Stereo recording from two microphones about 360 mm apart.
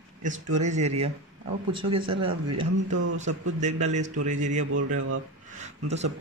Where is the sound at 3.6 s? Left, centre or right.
Centre.